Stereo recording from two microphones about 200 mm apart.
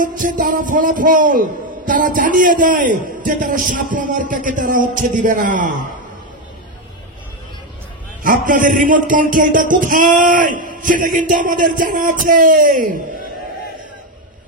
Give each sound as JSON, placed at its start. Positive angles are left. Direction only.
{"t": 0.0, "sound": "a man's voice", "side_deg": -40}
{"t": 8.2, "sound": "a man's voice", "side_deg": -40}